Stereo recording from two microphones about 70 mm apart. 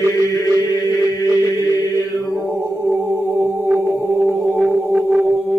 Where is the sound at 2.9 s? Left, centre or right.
Right.